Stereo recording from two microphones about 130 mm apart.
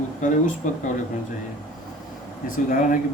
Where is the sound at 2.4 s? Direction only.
90° left.